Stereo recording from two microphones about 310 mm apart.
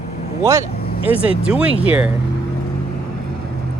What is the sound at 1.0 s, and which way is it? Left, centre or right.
Speech, centre.